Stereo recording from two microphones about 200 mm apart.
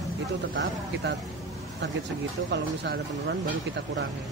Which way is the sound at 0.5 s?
70° right (ahead or behind).